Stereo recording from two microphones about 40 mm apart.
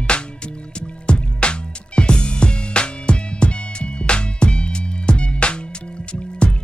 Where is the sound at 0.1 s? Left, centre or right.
Left.